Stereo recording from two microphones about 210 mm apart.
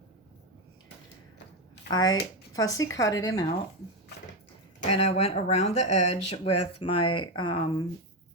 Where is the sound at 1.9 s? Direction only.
20° left (ahead or behind).